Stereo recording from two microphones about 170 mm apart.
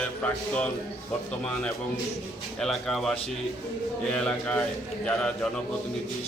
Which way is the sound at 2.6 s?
Centre (ahead or behind).